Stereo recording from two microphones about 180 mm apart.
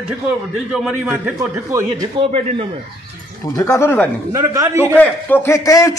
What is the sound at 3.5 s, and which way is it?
Speech, 15° left (ahead or behind).